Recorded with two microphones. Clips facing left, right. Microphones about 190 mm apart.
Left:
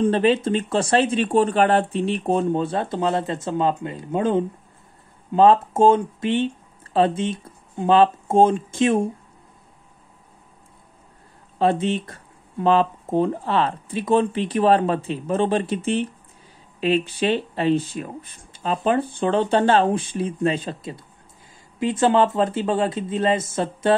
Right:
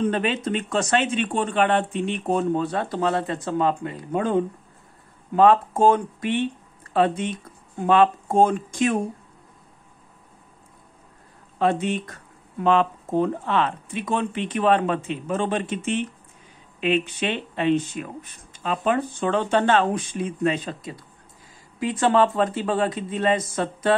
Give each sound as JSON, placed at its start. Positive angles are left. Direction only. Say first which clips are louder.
{"t": 0.0, "sound": "speech", "louder": "left 5 dB", "side_deg": 30}
{"t": 11.5, "sound": "speech", "louder": "left 2 dB", "side_deg": 30}